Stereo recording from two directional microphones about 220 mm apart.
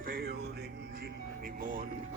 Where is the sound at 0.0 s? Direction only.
40° right (ahead or behind).